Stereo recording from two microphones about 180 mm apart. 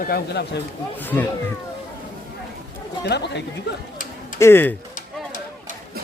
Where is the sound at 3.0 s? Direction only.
70° left (ahead or behind).